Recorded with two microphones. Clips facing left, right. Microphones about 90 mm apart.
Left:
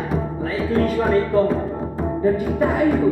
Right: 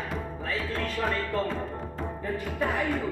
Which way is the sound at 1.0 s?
15° left (ahead or behind).